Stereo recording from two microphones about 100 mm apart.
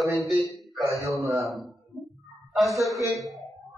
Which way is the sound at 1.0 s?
30° right (ahead or behind).